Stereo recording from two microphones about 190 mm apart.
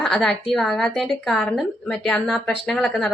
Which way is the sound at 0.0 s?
Centre (ahead or behind).